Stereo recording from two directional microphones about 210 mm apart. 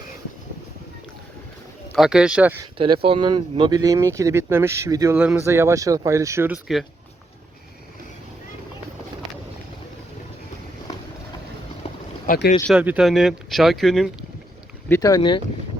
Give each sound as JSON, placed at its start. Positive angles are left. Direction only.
{"t": 2.0, "sound": "speech", "side_deg": -5}
{"t": 2.7, "sound": "speech", "side_deg": -25}
{"t": 12.3, "sound": "speech", "side_deg": 40}
{"t": 12.6, "sound": "speech", "side_deg": -5}
{"t": 14.8, "sound": "speech", "side_deg": 15}